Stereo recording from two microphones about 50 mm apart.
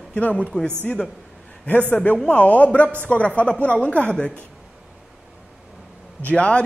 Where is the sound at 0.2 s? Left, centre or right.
Left.